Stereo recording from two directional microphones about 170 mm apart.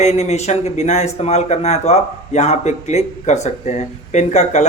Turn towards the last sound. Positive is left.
turn(degrees=45)  # may be behind; listen again after turning